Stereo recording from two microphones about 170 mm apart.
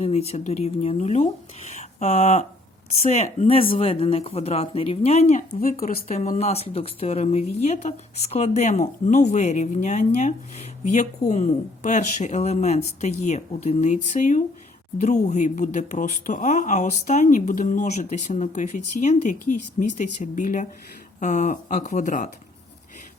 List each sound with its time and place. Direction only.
0.0 s speech: 35° left (ahead or behind)
5.5 s speech: 55° left (ahead or behind)
6.1 s speech: 40° left (ahead or behind)